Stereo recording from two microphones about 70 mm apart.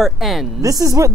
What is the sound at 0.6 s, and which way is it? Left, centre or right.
Speech, right.